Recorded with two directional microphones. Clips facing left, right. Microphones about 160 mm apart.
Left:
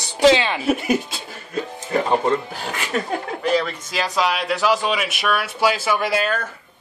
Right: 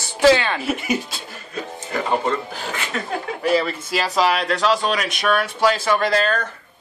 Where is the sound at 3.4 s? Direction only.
5° right (ahead or behind).